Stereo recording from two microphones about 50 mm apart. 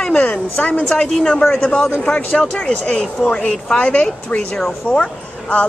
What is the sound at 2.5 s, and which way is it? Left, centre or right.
A woman's voice, left.